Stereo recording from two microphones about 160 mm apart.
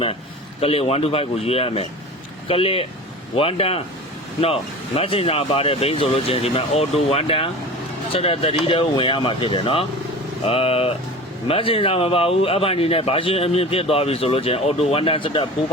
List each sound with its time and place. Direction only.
0.6 s a man's voice: 40° left (ahead or behind)